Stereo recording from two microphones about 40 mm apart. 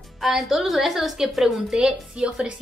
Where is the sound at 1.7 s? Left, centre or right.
Right.